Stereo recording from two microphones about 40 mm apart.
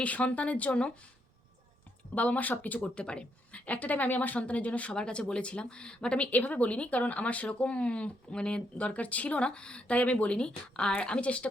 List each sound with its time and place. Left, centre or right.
0.0 s speech: left
2.1 s speech: left
2.9 s speech: left
3.5 s speech: left
4.9 s speech: left
6.3 s speech: left
10.3 s speech: left